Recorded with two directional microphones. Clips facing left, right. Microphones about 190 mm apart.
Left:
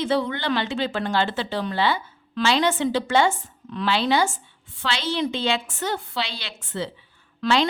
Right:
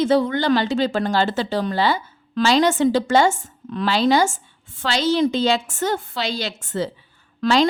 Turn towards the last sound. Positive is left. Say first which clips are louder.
# right 4 dB
turn(degrees=-40)  # may be behind; listen again after turning